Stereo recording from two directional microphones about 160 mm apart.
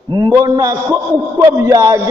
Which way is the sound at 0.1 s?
25° right (ahead or behind).